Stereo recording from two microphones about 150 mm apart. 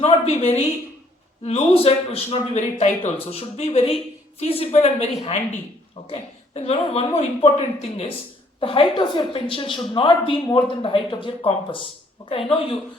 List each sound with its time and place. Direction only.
0.0 s a woman's voice: 45° left (ahead or behind)